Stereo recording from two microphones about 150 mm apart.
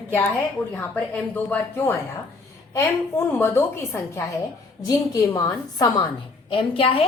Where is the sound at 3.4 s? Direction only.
15° left (ahead or behind).